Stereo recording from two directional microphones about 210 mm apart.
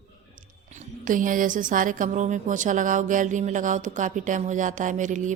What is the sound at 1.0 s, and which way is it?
Speech, 40° right (ahead or behind).